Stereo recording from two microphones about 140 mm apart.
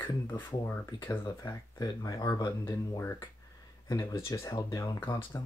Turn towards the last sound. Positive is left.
turn(degrees=15)  # may be behind; listen again after turning